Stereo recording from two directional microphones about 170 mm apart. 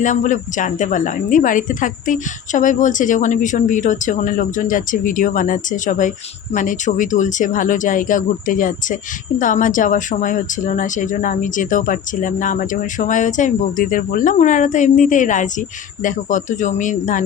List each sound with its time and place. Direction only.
0.0 s a woman's voice: 50° left (ahead or behind)